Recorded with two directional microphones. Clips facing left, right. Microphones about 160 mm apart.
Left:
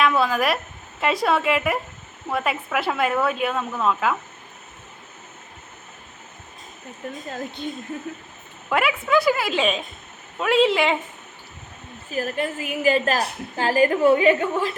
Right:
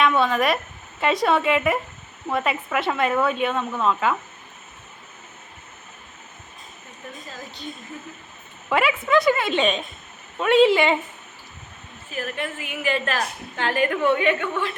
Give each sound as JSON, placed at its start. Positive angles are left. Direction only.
{"t": 0.0, "sound": "speech", "side_deg": 0}
{"t": 7.3, "sound": "a woman's voice", "side_deg": 55}
{"t": 8.7, "sound": "speech", "side_deg": 0}
{"t": 12.1, "sound": "a woman's voice", "side_deg": 40}